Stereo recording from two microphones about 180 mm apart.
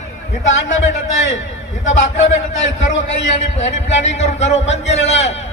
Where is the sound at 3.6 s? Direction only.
40° left (ahead or behind).